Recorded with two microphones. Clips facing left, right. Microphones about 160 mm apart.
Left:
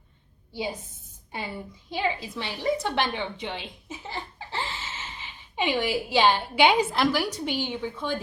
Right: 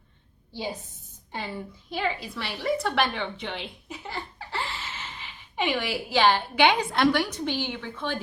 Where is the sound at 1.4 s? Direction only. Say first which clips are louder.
Right 1 dB; 15° left (ahead or behind).